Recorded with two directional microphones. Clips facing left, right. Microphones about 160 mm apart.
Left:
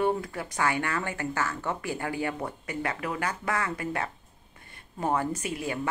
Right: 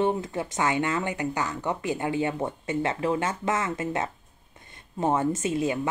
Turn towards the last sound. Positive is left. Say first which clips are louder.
# right 6 dB
turn(degrees=-20)  # may be behind; listen again after turning